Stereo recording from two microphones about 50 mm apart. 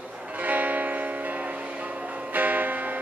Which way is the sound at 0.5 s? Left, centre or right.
Right.